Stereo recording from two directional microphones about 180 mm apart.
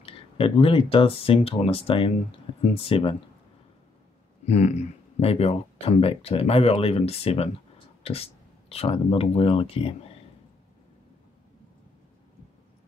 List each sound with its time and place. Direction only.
0.0 s speech: 30° left (ahead or behind)
4.5 s speech: 40° left (ahead or behind)